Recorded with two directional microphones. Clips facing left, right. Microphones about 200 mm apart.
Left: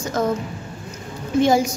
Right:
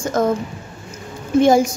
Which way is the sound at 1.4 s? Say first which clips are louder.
Right 4 dB; 50° right (ahead or behind).